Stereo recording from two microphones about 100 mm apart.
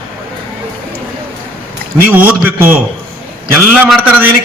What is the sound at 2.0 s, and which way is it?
Speech, 15° right (ahead or behind).